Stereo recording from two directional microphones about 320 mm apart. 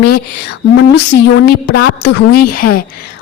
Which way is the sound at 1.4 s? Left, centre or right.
Left.